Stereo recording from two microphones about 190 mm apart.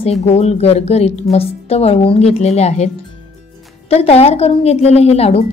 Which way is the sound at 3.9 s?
30° left (ahead or behind).